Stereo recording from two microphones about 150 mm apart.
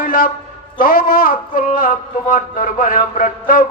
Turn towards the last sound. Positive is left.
turn(degrees=70)  # may be behind; listen again after turning